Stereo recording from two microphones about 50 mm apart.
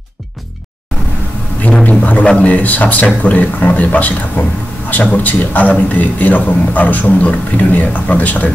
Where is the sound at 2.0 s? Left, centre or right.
Left.